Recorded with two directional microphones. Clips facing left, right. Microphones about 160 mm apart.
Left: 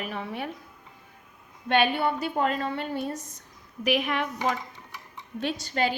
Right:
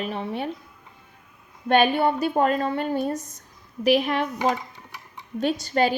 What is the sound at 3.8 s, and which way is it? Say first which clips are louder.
Speech: right 5 dB; 35° right (ahead or behind).